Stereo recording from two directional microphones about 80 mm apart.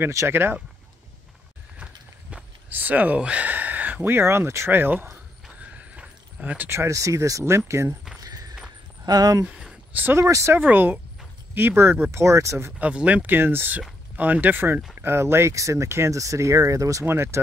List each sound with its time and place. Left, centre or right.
0.3 s speech: right
2.7 s speech: right
5.9 s a sound: centre
6.7 s speech: right
8.2 s walk: right
9.0 s speech: right
10.1 s speech: right
10.6 s speech: right
12.7 s speech: centre; by 17.0 s right
17.0 s speech: right